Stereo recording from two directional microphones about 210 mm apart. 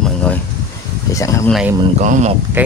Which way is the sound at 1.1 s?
15° left (ahead or behind).